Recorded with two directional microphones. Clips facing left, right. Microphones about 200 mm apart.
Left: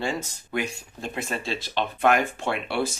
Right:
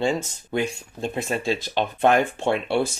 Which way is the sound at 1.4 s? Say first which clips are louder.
Right 4 dB; 45° right (ahead or behind).